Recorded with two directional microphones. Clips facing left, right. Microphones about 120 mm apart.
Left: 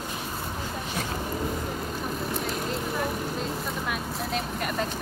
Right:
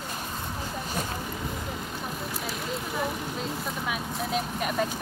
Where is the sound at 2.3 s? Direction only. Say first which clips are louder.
Left 3 dB; 5° right (ahead or behind).